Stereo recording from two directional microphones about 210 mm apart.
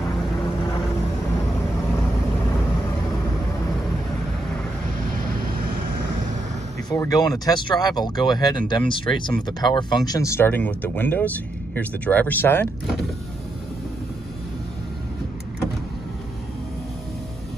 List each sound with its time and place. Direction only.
6.9 s speech: 15° left (ahead or behind)